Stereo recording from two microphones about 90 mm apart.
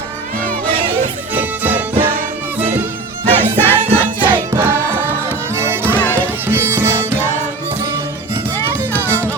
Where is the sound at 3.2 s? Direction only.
20° left (ahead or behind).